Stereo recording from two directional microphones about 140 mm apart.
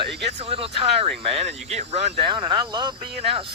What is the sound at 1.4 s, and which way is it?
Speech, 45° right (ahead or behind).